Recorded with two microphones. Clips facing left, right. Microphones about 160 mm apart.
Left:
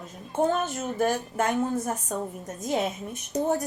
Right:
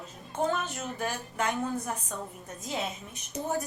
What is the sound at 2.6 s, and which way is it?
Speech, 60° left (ahead or behind).